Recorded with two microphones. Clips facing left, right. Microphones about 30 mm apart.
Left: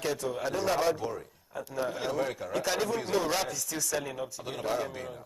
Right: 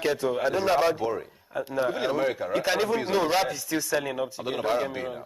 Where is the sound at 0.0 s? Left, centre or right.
Right.